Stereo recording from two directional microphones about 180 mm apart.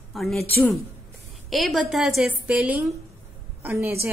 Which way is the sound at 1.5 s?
Centre (ahead or behind).